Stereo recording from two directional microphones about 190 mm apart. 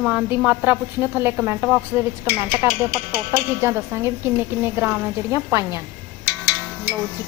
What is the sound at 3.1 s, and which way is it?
A woman's voice, 10° right (ahead or behind).